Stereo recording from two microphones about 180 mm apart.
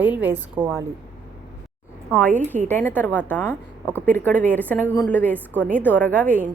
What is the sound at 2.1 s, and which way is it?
A woman's voice, 10° left (ahead or behind).